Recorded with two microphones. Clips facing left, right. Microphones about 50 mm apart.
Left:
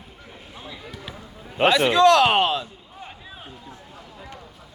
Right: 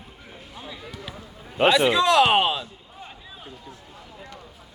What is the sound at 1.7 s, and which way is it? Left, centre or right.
Speech, centre.